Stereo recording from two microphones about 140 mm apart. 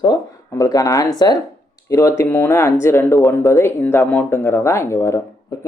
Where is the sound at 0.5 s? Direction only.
25° left (ahead or behind).